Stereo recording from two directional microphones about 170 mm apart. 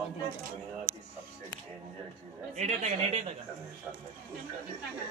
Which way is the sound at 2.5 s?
45° right (ahead or behind).